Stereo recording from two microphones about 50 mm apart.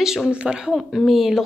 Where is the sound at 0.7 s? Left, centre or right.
Centre.